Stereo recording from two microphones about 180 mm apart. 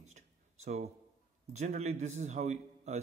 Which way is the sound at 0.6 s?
40° right (ahead or behind).